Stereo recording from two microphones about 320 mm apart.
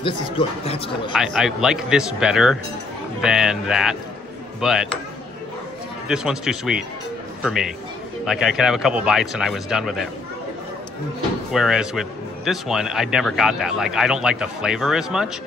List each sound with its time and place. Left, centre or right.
0.0 s speech: centre
1.1 s a man's voice: centre
6.0 s a man's voice: centre
11.5 s a man's voice: centre